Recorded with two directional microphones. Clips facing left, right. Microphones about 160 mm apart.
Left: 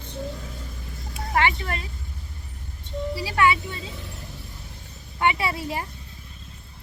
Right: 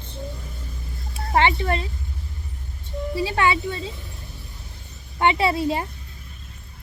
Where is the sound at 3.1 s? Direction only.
25° right (ahead or behind).